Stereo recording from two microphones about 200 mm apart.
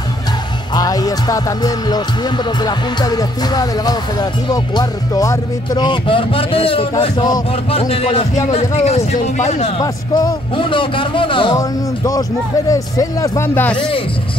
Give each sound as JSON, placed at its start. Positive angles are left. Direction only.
{"t": 0.7, "sound": "speech", "side_deg": 20}
{"t": 9.8, "sound": "speech", "side_deg": 20}
{"t": 13.7, "sound": "speech", "side_deg": 25}